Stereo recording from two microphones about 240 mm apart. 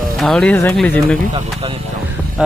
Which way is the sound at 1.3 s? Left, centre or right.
Right.